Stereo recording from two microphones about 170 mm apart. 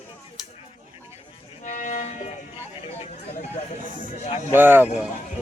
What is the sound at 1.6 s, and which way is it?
Music, 50° left (ahead or behind).